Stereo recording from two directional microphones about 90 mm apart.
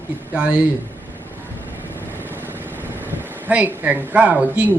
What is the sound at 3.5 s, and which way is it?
Speech, 20° right (ahead or behind).